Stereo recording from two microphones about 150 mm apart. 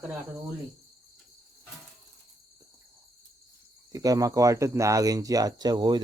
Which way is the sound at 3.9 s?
25° right (ahead or behind).